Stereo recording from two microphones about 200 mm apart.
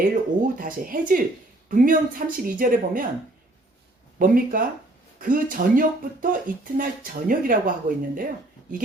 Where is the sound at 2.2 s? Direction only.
40° right (ahead or behind).